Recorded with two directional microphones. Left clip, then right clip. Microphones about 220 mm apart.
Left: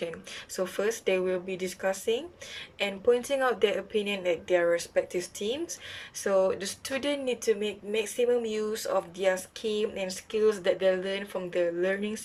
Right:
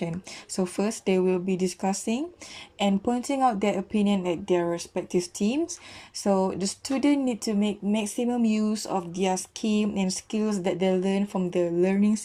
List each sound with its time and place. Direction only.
0.0 s speech: 25° right (ahead or behind)